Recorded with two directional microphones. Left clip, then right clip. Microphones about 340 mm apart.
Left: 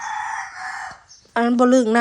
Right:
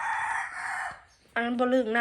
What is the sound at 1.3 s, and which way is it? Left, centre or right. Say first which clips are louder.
Speech: left 10 dB; centre.